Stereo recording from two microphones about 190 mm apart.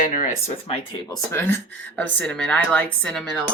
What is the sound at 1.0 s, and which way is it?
A woman's voice, 15° left (ahead or behind).